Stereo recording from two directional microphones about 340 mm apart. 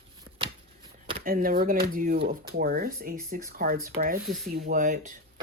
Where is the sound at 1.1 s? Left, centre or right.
Right.